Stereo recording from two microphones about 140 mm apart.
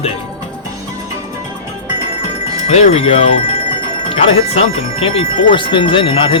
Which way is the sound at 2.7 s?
50° left (ahead or behind).